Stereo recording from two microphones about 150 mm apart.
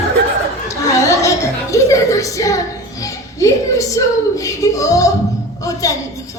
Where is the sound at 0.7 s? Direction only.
20° left (ahead or behind).